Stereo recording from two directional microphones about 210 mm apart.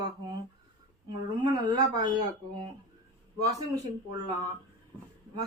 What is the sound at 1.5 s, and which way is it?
Speech, 20° right (ahead or behind).